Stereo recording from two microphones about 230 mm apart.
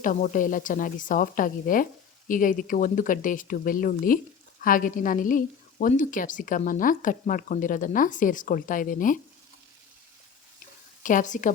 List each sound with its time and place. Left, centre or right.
0.0 s a woman's voice: left
11.0 s a woman's voice: left